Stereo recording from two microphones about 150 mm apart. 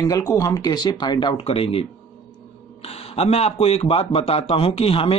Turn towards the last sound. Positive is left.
turn(degrees=40)  # may be behind; listen again after turning